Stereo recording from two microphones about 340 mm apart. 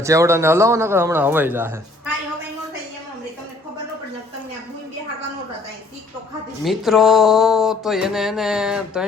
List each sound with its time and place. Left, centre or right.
0.0 s a man's voice: centre
6.7 s music: centre